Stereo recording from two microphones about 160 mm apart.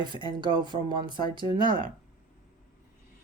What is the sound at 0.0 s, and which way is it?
Speech, 30° right (ahead or behind).